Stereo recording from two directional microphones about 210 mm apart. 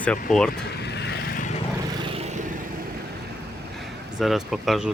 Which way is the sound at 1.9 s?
25° right (ahead or behind).